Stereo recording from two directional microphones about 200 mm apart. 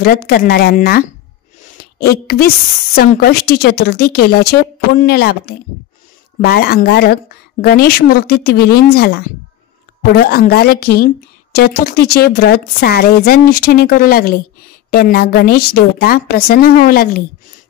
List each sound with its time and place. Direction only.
0.0 s a woman's voice: 50° left (ahead or behind)